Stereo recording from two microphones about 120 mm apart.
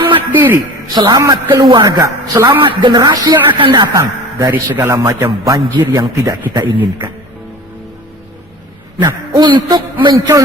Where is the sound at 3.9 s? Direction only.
25° right (ahead or behind).